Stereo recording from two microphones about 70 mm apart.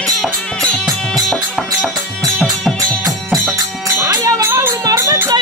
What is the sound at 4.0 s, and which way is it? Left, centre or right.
Music, right.